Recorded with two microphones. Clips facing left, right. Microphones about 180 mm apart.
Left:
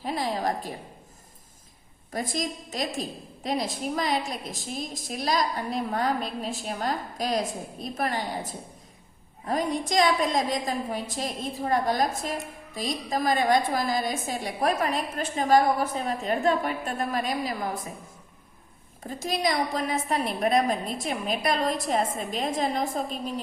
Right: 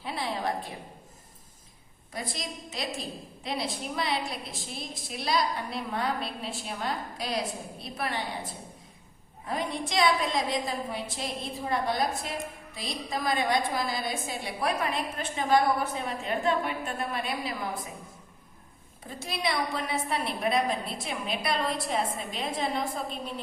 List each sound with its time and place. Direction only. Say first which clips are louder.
0.0 s a sound: left 4 dB; 40° left (ahead or behind)
2.1 s a woman's voice: left 6 dB; 45° left (ahead or behind)
19.2 s a woman's voice: left 4 dB; 40° left (ahead or behind)